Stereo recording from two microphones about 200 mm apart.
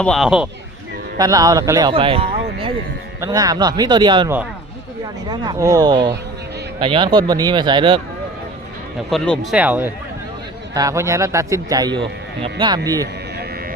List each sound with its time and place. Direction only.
0.0 s speech: centre (ahead or behind)
1.2 s speech: 15° right (ahead or behind)
5.3 s speech: 20° right (ahead or behind)
9.0 s speech: 5° left (ahead or behind); by 13.1 s 20° right (ahead or behind)